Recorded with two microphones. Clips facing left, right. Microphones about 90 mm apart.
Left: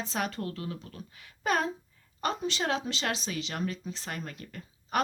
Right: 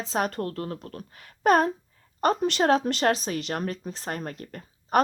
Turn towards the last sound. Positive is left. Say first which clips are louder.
# right 8 dB
turn(degrees=-45)  # may be behind; listen again after turning